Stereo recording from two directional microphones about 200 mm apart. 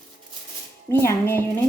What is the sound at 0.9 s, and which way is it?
Speech, 15° left (ahead or behind).